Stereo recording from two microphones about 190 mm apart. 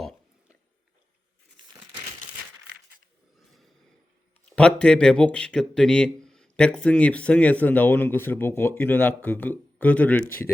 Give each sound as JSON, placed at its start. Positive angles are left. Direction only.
{"t": 0.0, "sound": "a sound", "side_deg": 0}
{"t": 1.7, "sound": "crumpling", "side_deg": -30}
{"t": 4.4, "sound": "speech", "side_deg": 5}